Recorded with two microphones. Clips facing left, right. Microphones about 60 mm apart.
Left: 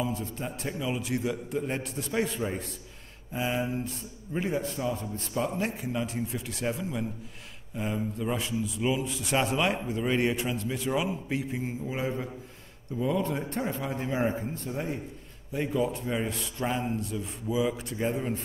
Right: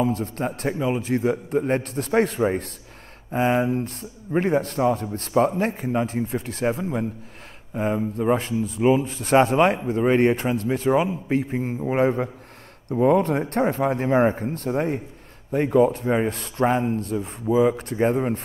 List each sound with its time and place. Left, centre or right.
0.0 s a man's voice: right